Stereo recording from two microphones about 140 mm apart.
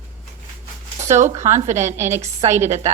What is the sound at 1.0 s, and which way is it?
A woman's voice, 55° right (ahead or behind).